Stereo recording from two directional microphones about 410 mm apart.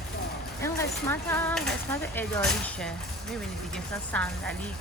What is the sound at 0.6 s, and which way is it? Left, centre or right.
Speech, centre.